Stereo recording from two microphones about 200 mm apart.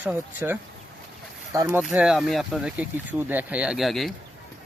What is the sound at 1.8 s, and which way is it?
Speech, 5° right (ahead or behind).